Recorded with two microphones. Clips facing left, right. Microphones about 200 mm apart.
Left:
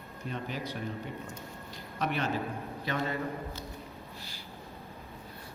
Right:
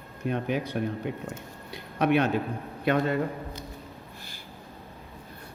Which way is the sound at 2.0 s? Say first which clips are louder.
Right 9 dB; 65° right (ahead or behind).